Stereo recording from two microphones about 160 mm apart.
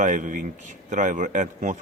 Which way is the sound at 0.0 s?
55° right (ahead or behind).